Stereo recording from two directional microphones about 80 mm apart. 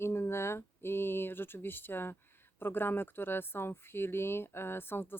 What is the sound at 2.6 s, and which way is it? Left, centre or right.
Speech, left.